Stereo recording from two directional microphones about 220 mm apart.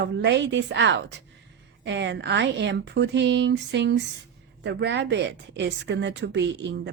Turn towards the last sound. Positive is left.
turn(degrees=-55)  # may be behind; listen again after turning